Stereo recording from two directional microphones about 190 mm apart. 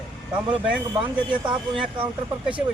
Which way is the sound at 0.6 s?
5° right (ahead or behind).